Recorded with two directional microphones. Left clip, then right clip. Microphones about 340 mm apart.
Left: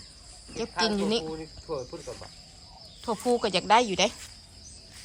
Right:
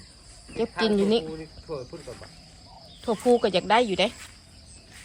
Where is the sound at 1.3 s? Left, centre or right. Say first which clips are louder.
Left 1 dB; left.